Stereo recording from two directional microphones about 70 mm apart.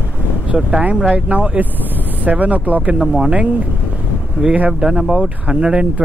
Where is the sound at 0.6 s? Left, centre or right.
Centre.